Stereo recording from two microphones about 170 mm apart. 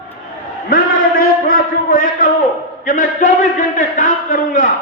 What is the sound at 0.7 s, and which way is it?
A man's voice, 60° left (ahead or behind).